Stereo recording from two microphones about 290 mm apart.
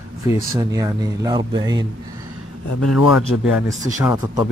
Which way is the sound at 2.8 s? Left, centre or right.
Left.